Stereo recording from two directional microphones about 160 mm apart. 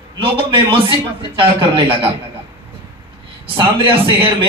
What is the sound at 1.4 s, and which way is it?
Speech, 30° right (ahead or behind).